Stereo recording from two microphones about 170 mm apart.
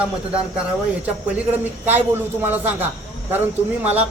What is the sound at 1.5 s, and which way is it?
A man's voice, 10° right (ahead or behind).